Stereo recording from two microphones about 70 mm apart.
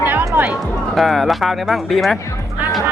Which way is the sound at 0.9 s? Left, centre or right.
Centre.